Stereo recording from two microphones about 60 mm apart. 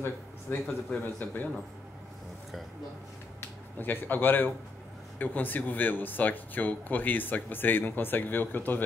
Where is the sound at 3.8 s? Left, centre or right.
Left.